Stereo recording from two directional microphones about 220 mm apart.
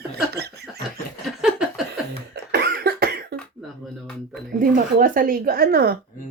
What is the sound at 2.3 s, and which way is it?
Cough, 50° right (ahead or behind).